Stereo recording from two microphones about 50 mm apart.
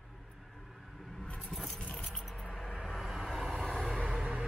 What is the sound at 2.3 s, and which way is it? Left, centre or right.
Vehicle, centre.